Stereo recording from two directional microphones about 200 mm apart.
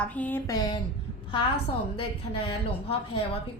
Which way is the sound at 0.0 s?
5° left (ahead or behind).